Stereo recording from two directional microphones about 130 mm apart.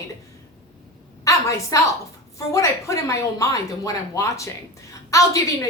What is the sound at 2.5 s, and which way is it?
A woman's voice, 25° left (ahead or behind).